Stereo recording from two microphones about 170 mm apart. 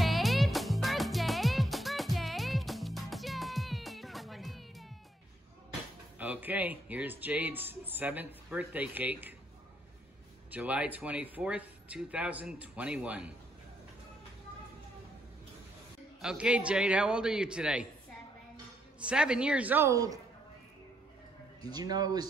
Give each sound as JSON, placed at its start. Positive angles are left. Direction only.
{"t": 0.0, "sound": "music", "side_deg": 0}
{"t": 6.1, "sound": "speech", "side_deg": -10}
{"t": 10.5, "sound": "speech", "side_deg": -10}
{"t": 16.2, "sound": "a man's voice", "side_deg": -5}
{"t": 18.9, "sound": "speech", "side_deg": -5}
{"t": 21.6, "sound": "speech", "side_deg": -25}